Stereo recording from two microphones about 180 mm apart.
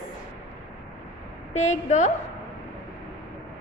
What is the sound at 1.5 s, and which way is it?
Speech, 40° left (ahead or behind).